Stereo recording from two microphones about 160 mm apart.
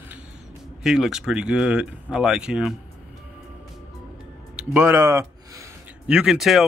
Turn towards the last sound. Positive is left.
turn(degrees=0)  # may be behind; listen again after turning